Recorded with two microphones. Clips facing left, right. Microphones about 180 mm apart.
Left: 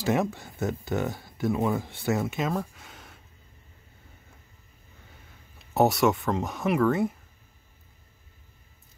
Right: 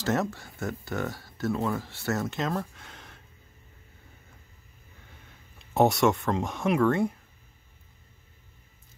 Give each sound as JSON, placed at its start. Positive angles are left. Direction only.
{"t": 0.0, "sound": "speech", "side_deg": 15}
{"t": 5.8, "sound": "speech", "side_deg": 0}